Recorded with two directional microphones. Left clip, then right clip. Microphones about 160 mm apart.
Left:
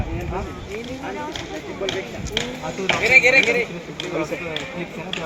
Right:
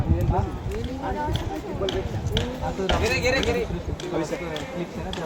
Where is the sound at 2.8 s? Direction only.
90° right.